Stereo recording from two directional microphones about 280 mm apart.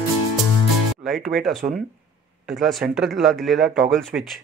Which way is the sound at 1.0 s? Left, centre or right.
Centre.